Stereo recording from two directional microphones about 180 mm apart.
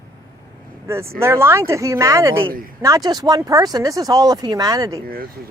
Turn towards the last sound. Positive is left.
turn(degrees=-20)  # may be behind; listen again after turning